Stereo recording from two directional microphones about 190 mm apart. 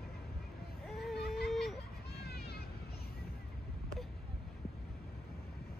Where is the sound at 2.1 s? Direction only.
55° left (ahead or behind).